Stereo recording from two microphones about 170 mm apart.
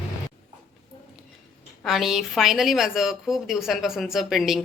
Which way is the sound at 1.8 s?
Centre (ahead or behind).